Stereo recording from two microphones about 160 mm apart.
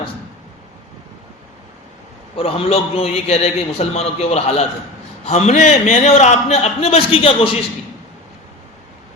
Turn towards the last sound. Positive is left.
turn(degrees=35)  # may be behind; listen again after turning